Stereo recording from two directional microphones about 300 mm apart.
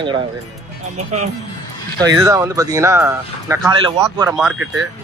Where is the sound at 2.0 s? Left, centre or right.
Centre.